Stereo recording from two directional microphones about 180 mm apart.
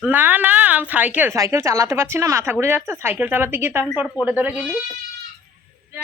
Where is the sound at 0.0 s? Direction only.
10° right (ahead or behind).